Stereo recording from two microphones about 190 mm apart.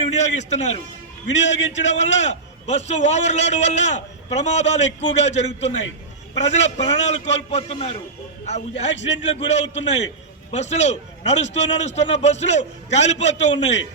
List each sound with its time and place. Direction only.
0.1 s a man's voice: 35° left (ahead or behind)
1.3 s a man's voice: 70° left (ahead or behind)
2.0 s a man's voice: 35° left (ahead or behind)
8.9 s a man's voice: 70° left (ahead or behind)
9.3 s a man's voice: 35° left (ahead or behind)